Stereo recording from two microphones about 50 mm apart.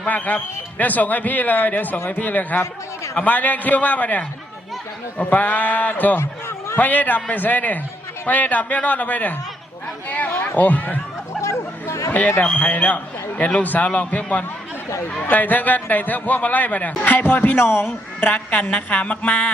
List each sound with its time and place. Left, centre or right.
0.0 s speech: left
11.9 s chatter: left
12.5 s a man's voice: left